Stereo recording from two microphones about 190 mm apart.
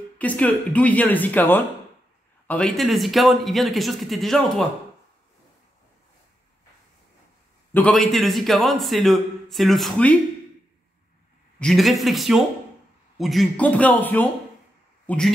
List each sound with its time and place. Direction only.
0.2 s a man's voice: 10° left (ahead or behind)
7.7 s a man's voice: 5° left (ahead or behind)
11.6 s a man's voice: centre (ahead or behind)